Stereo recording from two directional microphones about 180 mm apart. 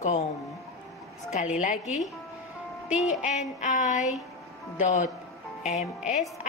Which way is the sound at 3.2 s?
40° left (ahead or behind).